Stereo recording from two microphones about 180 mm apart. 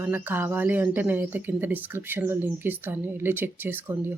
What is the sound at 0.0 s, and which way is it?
Speech, 10° right (ahead or behind).